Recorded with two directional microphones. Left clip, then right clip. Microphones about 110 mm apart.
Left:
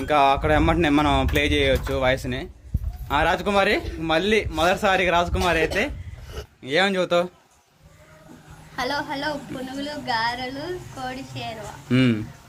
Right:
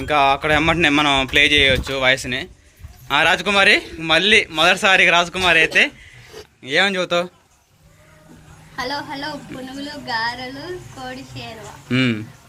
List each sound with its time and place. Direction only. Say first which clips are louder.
0.0 s a man's voice: right 2 dB; 15° left (ahead or behind)
8.7 s speech: even; 50° left (ahead or behind)
11.9 s a man's voice: right 2 dB; 15° left (ahead or behind)